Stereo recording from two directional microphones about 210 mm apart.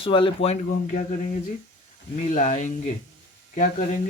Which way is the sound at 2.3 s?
35° left (ahead or behind).